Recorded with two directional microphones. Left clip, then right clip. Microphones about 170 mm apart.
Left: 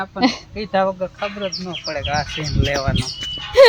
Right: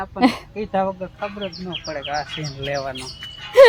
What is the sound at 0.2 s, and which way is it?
Speech, 10° right (ahead or behind).